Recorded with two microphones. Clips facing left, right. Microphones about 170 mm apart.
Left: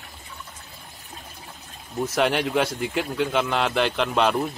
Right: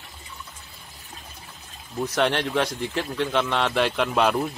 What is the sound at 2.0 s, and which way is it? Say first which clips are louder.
Speech: left 1 dB; 5° left (ahead or behind).